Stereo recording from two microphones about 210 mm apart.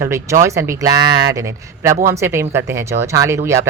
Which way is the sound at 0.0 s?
15° right (ahead or behind).